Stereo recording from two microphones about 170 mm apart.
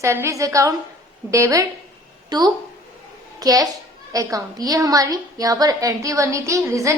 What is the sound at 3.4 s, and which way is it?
A woman's voice, 20° right (ahead or behind).